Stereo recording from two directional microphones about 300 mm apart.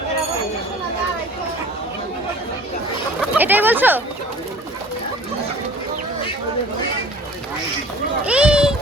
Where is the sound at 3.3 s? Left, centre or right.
Centre.